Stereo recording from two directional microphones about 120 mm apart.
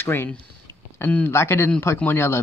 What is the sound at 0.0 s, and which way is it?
A man's voice, 15° left (ahead or behind).